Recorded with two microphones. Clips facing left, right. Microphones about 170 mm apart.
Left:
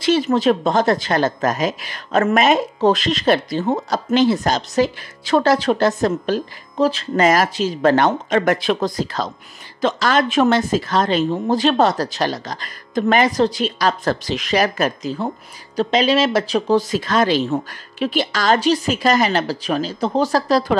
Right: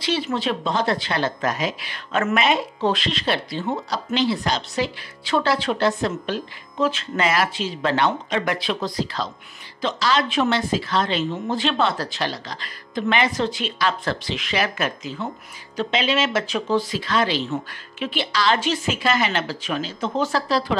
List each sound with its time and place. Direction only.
0.0 s speech: 45° left (ahead or behind)